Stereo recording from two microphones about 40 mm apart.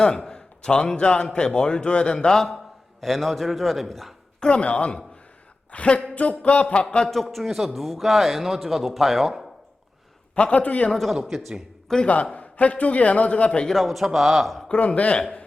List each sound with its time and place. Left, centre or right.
0.3 s a man's voice: left
2.2 s a man's voice: centre
4.4 s a man's voice: left
7.1 s speech: centre
10.3 s a man's voice: left
10.9 s speech: centre
12.0 s a man's voice: left
13.7 s speech: centre
14.9 s a man's voice: left